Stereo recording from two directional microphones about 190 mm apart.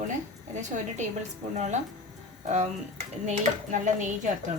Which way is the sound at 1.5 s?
40° right (ahead or behind).